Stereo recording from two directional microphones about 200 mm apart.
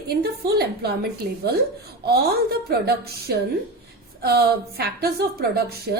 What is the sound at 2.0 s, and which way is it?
A woman's voice, 50° right (ahead or behind).